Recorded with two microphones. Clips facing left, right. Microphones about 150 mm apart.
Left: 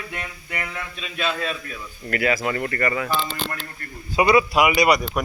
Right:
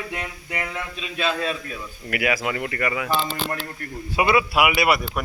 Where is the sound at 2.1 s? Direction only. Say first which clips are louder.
Left 2 dB; 10° right (ahead or behind).